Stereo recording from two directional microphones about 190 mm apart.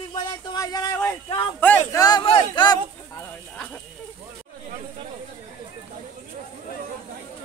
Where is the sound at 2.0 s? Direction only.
25° left (ahead or behind).